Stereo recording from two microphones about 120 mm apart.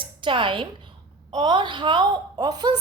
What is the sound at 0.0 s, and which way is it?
A woman's voice, 45° right (ahead or behind).